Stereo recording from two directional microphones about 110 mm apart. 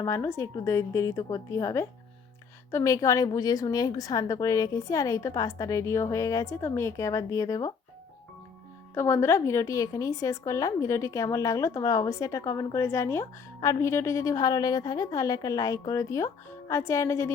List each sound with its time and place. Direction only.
0.0 s a woman's voice: 25° left (ahead or behind)
9.0 s a woman's voice: 25° left (ahead or behind)